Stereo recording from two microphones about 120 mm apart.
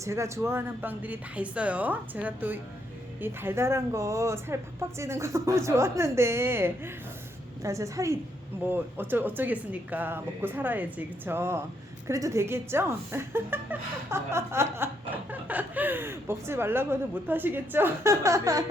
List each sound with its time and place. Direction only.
0.0 s speech: 25° right (ahead or behind)